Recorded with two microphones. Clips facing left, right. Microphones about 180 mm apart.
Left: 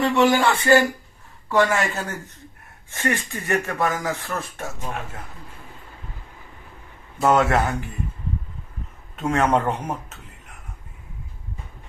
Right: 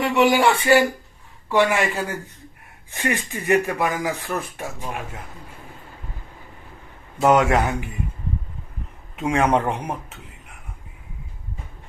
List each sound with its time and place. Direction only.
0.0 s speech: 15° right (ahead or behind)
7.3 s speech: 15° right (ahead or behind)
9.2 s speech: 10° right (ahead or behind)